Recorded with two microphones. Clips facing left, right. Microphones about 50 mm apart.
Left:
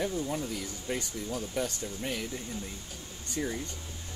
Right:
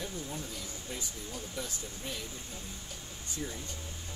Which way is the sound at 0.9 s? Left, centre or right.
Left.